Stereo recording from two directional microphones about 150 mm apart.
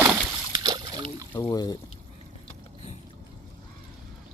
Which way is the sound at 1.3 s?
20° left (ahead or behind).